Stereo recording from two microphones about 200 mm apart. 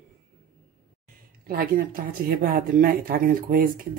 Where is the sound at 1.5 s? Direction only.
45° right (ahead or behind).